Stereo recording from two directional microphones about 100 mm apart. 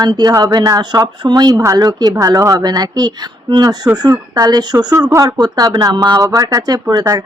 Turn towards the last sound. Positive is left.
turn(degrees=-35)  # may be behind; listen again after turning